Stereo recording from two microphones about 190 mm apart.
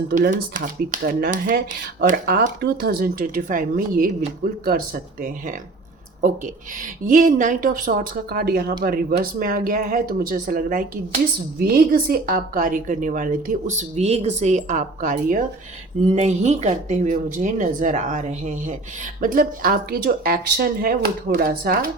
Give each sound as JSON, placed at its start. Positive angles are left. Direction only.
{"t": 0.1, "sound": "speech", "side_deg": -45}
{"t": 6.2, "sound": "speech", "side_deg": -45}